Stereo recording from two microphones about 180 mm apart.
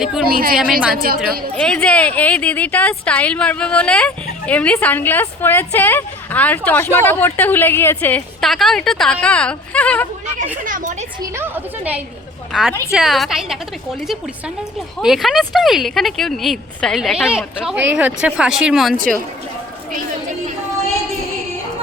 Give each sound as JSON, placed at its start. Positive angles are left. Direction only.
{"t": 0.0, "sound": "speech", "side_deg": -5}
{"t": 0.3, "sound": "a woman's voice", "side_deg": -55}
{"t": 1.5, "sound": "speech", "side_deg": 5}
{"t": 10.6, "sound": "a woman's voice", "side_deg": -50}
{"t": 11.2, "sound": "a woman's voice", "side_deg": -10}
{"t": 14.9, "sound": "speech", "side_deg": 0}